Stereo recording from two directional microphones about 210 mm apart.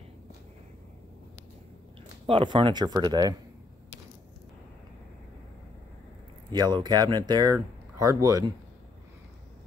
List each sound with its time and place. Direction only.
2.2 s speech: 25° right (ahead or behind)
6.5 s a man's voice: 20° right (ahead or behind)